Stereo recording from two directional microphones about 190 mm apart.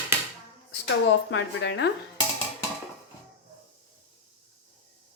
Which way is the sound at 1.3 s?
75° left (ahead or behind).